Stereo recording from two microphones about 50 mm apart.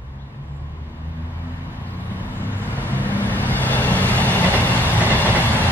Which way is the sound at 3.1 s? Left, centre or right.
Left.